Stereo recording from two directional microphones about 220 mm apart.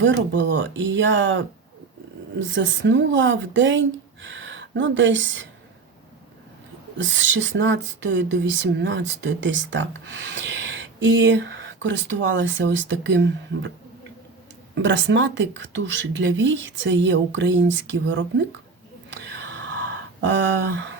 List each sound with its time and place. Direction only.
0.0 s speech: 55° right (ahead or behind)
2.6 s speech: 55° right (ahead or behind)
7.0 s speech: 60° right (ahead or behind)
14.8 s speech: 55° right (ahead or behind)
19.1 s whispering: 55° right (ahead or behind)
20.2 s speech: 55° right (ahead or behind)